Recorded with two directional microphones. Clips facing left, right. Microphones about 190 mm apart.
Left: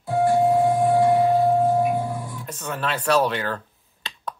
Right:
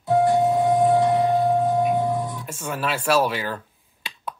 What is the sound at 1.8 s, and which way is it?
Printer, 20° right (ahead or behind).